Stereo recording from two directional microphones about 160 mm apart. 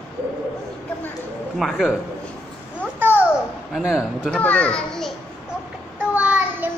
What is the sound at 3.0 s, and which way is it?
Babbling, 15° right (ahead or behind).